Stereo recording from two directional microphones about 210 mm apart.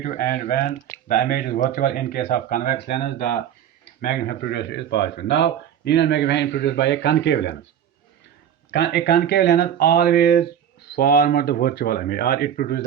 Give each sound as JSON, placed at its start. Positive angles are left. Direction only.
{"t": 0.0, "sound": "speech", "side_deg": 40}
{"t": 8.7, "sound": "speech", "side_deg": 50}